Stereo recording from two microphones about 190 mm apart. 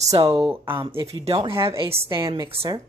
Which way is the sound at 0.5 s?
15° right (ahead or behind).